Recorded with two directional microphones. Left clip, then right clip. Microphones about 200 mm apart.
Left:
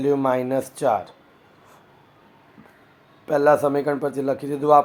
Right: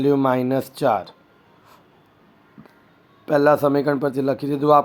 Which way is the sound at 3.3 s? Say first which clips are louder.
Right 1 dB; 35° right (ahead or behind).